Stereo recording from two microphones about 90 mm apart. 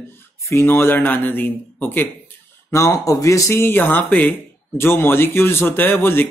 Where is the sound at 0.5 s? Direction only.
30° left (ahead or behind).